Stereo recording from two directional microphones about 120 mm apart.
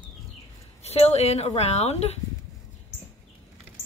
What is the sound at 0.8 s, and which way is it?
Speech, 65° left (ahead or behind).